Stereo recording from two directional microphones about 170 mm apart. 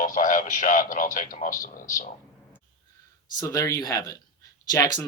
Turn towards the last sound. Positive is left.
turn(degrees=20)  # may be behind; listen again after turning